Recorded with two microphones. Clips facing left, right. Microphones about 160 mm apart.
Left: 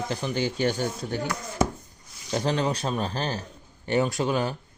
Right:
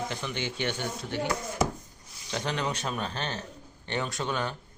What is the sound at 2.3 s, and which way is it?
Speech, 35° left (ahead or behind).